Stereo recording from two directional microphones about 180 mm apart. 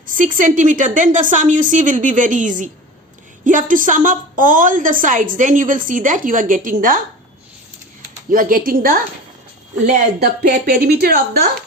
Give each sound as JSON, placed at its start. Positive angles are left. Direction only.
{"t": 0.1, "sound": "a woman's voice", "side_deg": -45}
{"t": 8.3, "sound": "a woman's voice", "side_deg": -50}
{"t": 10.2, "sound": "speech", "side_deg": -65}